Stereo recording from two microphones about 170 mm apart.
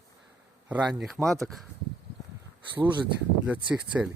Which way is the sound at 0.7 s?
5° right (ahead or behind).